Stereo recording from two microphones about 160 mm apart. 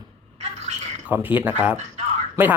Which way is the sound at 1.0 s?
10° right (ahead or behind).